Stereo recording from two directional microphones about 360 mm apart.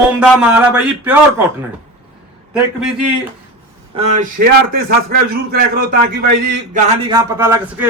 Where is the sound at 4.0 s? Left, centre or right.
Centre.